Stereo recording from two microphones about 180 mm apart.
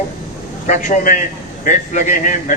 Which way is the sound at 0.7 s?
45° left (ahead or behind).